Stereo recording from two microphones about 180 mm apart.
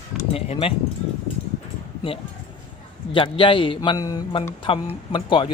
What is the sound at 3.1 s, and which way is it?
A man's voice, 30° left (ahead or behind).